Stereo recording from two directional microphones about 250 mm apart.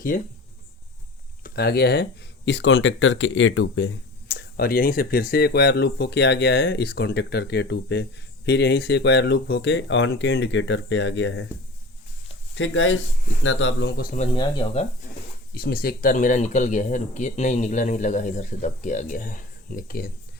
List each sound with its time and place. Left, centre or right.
0.1 s speech: left
1.5 s speech: left
12.5 s speech: left
14.3 s speech: centre
15.5 s speech: left